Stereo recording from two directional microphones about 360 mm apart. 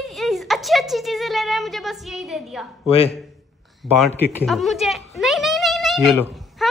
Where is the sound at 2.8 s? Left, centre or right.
Centre.